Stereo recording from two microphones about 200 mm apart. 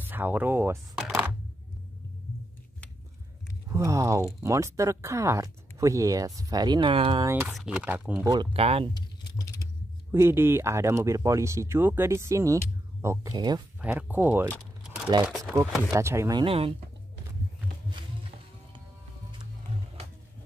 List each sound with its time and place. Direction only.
0.0 s speech: 10° right (ahead or behind)
3.7 s speech: 15° right (ahead or behind)
7.2 s speech: 10° right (ahead or behind)
8.3 s speech: 25° right (ahead or behind)
10.1 s speech: 10° right (ahead or behind)
15.9 s speech: 15° right (ahead or behind)